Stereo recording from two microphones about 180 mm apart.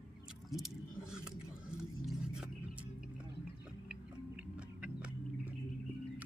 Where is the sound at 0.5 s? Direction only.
5° right (ahead or behind).